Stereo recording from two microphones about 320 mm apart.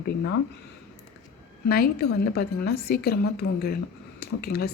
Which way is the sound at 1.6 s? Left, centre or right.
Left.